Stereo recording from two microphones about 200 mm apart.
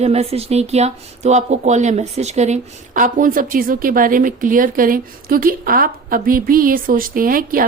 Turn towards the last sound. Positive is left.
turn(degrees=-45)  # may be behind; listen again after turning